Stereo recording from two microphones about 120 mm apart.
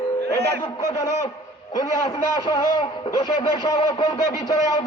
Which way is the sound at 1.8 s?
25° left (ahead or behind).